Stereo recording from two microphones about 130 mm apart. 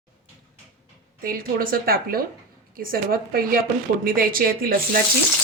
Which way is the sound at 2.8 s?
90° right.